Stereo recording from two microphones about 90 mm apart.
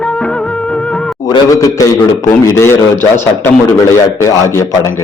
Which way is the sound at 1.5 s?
40° left (ahead or behind).